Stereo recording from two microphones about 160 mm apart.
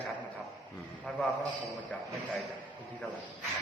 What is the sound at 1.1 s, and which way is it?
Speech, centre (ahead or behind).